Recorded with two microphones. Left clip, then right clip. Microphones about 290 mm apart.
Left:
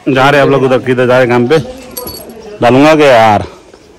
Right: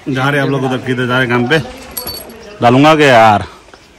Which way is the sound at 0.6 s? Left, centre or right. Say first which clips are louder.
Left 7 dB; centre.